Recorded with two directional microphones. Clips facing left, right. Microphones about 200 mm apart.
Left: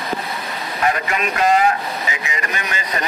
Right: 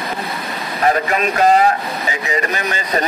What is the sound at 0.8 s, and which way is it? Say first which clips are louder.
A man's voice: right 4 dB; 40° right (ahead or behind).